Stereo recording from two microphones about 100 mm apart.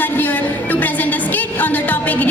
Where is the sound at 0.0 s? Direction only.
20° left (ahead or behind).